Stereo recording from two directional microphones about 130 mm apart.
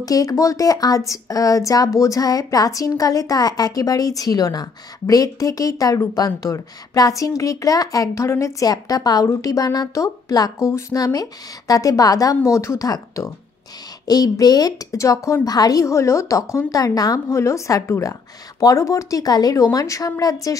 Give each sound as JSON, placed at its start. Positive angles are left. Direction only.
{"t": 0.0, "sound": "speech", "side_deg": 30}